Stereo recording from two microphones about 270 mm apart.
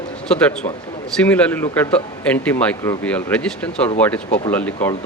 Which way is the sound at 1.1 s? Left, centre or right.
Centre.